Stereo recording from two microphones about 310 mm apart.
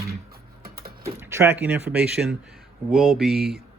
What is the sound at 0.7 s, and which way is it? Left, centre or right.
Typing, right.